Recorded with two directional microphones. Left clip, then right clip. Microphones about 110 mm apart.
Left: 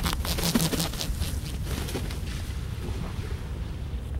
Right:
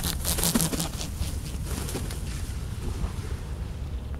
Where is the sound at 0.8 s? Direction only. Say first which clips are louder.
Left 3 dB; 20° left (ahead or behind).